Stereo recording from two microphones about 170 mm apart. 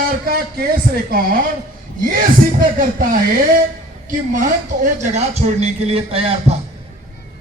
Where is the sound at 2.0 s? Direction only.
55° right (ahead or behind); by 6.6 s 35° right (ahead or behind).